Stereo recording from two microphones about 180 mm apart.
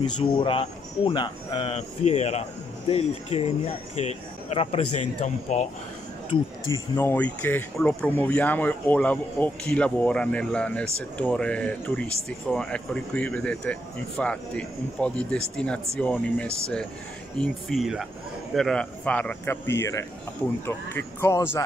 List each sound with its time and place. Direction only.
0.4 s speech: 30° left (ahead or behind)
6.3 s speech: 25° left (ahead or behind)
7.0 s speech: 10° left (ahead or behind)